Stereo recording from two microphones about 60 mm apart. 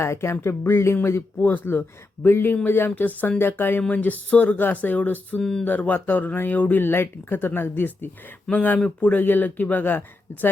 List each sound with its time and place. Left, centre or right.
0.0 s speech: left
1.4 s speech: left
3.8 s speech: left
5.4 s speech: centre
5.6 s speech: left
8.5 s speech: centre
8.8 s speech: left